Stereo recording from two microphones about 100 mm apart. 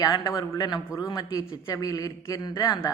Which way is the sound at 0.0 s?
40° left (ahead or behind).